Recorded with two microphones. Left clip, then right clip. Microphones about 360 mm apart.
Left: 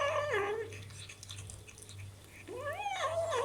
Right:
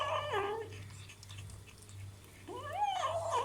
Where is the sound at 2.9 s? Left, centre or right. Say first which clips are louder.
Left 1 dB; centre.